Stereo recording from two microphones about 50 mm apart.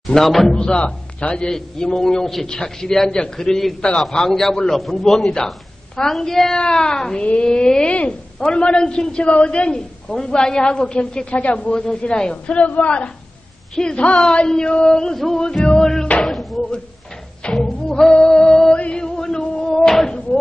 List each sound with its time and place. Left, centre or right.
0.0 s speech: centre
0.7 s a man's voice: left
7.2 s a woman's voice: left
16.3 s a man's voice: centre
18.1 s music: centre